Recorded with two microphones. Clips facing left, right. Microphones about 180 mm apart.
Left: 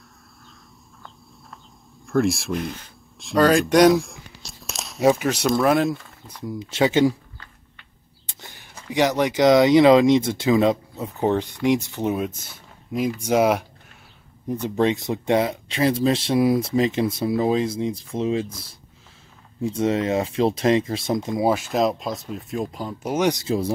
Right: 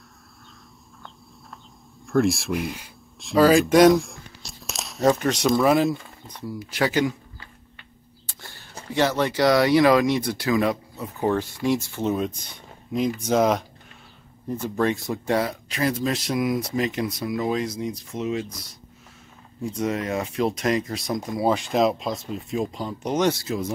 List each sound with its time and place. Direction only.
2.0 s speech: centre (ahead or behind)
6.6 s speech: 25° left (ahead or behind)
8.3 s a sound: 20° left (ahead or behind)
8.9 s speech: 15° left (ahead or behind)
21.5 s speech: 5° left (ahead or behind)
23.4 s speech: 30° left (ahead or behind)